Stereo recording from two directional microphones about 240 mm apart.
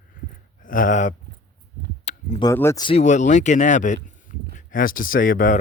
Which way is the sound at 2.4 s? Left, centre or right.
Centre.